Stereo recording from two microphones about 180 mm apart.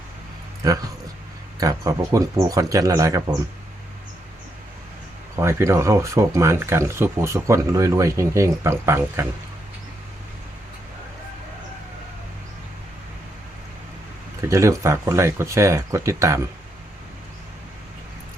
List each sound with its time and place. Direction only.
0.6 s speech: 20° right (ahead or behind)
5.4 s speech: 15° right (ahead or behind)
14.4 s speech: 15° right (ahead or behind)